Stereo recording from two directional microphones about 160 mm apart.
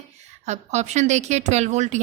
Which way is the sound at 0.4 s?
45° right (ahead or behind).